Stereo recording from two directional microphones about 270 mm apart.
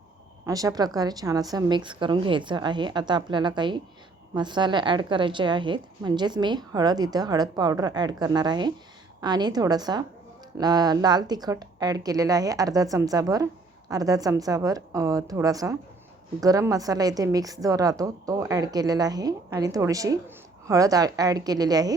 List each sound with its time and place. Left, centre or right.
0.4 s a woman's voice: centre